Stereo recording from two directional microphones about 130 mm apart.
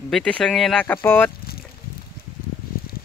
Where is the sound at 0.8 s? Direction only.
15° left (ahead or behind).